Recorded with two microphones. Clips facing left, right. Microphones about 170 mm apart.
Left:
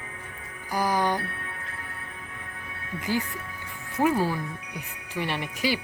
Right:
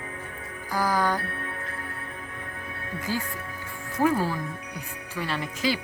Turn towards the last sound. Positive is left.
turn(degrees=15)  # may be behind; listen again after turning